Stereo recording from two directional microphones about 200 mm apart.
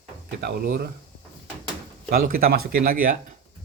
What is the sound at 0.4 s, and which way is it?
Speech, 50° right (ahead or behind).